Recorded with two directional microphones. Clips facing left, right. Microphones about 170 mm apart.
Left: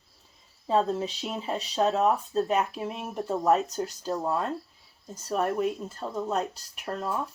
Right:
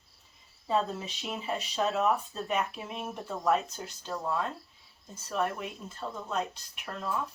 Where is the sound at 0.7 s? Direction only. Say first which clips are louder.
Left 5 dB; 35° left (ahead or behind).